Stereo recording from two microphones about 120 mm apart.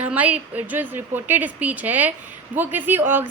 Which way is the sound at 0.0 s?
10° right (ahead or behind).